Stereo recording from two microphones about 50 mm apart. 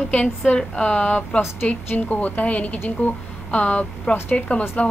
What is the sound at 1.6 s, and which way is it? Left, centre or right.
A woman's voice, left.